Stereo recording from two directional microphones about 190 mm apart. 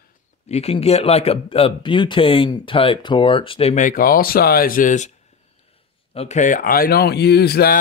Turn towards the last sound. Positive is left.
turn(degrees=55)  # may be behind; listen again after turning